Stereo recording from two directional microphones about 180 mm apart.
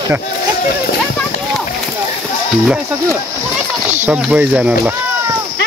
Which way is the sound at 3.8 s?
10° right (ahead or behind).